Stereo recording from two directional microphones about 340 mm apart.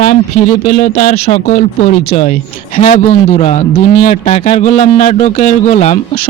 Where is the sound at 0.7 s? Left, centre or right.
Centre.